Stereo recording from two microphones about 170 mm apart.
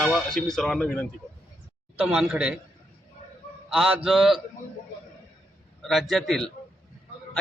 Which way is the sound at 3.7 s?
5° right (ahead or behind).